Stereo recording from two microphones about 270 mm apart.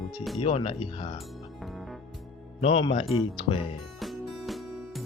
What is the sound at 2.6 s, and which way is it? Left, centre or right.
Speech, centre.